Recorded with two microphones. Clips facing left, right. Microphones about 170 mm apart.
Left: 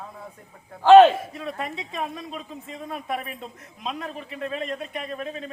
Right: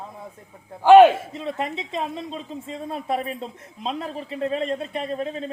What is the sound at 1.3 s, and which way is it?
Speech, 25° right (ahead or behind).